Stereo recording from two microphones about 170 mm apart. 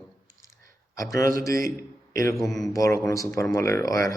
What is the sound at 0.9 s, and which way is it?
Speech, 20° left (ahead or behind).